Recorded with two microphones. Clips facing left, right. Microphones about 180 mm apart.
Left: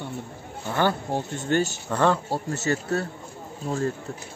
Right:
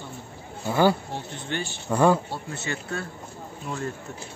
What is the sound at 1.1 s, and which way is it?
Speech, 45° left (ahead or behind).